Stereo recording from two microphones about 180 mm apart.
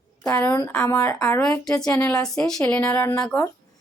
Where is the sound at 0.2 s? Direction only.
10° left (ahead or behind).